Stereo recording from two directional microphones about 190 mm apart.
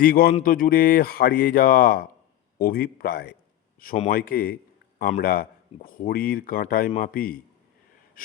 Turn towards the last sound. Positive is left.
turn(degrees=50)  # may be behind; listen again after turning